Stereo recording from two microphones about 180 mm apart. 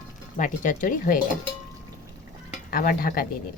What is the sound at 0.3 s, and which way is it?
Speech, 45° left (ahead or behind).